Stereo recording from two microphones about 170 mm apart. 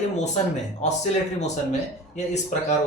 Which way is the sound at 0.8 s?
40° left (ahead or behind).